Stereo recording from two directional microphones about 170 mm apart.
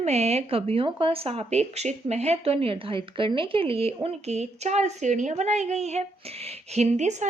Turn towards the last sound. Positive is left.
turn(degrees=-45)  # may be behind; listen again after turning